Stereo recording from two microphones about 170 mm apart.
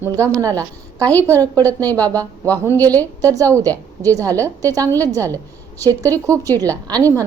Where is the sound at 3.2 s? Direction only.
20° right (ahead or behind).